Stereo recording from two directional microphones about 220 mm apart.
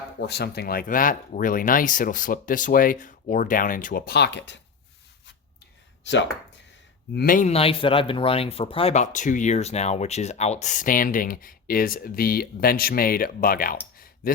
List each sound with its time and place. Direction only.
0.3 s speech: 45° left (ahead or behind)
6.0 s speech: 55° left (ahead or behind)
7.1 s speech: 40° left (ahead or behind)